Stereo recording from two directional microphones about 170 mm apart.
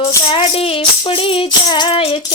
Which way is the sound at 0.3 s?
35° left (ahead or behind).